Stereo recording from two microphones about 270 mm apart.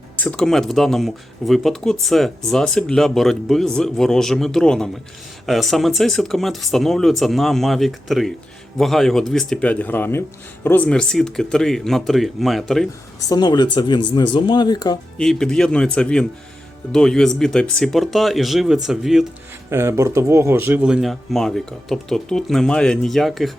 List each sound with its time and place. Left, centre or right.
0.2 s speech: centre
13.2 s speech: centre
15.2 s speech: centre